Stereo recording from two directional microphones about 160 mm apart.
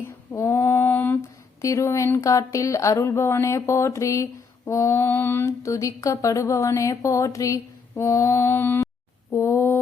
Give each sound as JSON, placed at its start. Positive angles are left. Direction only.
{"t": 0.0, "sound": "female singing", "side_deg": 15}
{"t": 1.6, "sound": "speech", "side_deg": 20}
{"t": 9.3, "sound": "a sound", "side_deg": 20}